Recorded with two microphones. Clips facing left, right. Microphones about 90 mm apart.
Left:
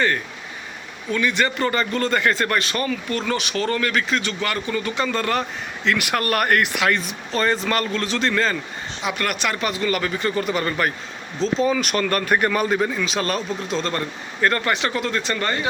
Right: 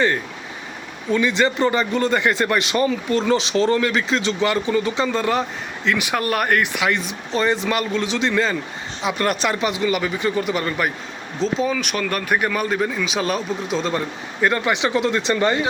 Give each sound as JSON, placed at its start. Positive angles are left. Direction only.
{"t": 1.1, "sound": "a man's voice", "side_deg": -20}
{"t": 5.1, "sound": "speech", "side_deg": -5}
{"t": 6.8, "sound": "speech", "side_deg": -15}
{"t": 9.0, "sound": "a man's voice", "side_deg": -30}
{"t": 9.6, "sound": "speech", "side_deg": -15}